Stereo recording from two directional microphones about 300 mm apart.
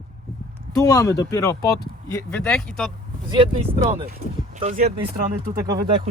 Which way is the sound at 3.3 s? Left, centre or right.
Centre.